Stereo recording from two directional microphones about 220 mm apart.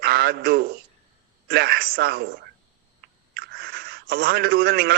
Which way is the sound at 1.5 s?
45° right (ahead or behind).